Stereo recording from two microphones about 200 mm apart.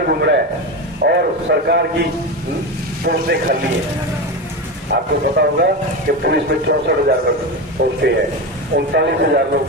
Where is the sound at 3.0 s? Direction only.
50° right (ahead or behind).